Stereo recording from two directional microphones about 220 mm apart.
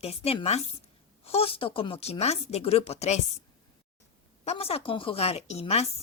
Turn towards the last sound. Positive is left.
turn(degrees=30)  # may be behind; listen again after turning